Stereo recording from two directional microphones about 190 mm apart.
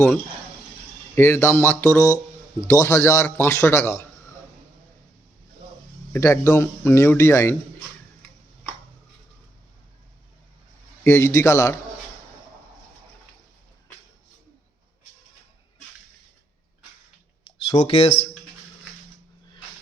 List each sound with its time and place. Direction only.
1.1 s a man's voice: 15° left (ahead or behind)
6.1 s a man's voice: 15° left (ahead or behind)
11.0 s a man's voice: 15° left (ahead or behind)
17.4 s a sound: 30° left (ahead or behind)